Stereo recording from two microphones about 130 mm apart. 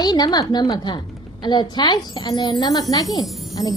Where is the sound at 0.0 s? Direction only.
30° left (ahead or behind).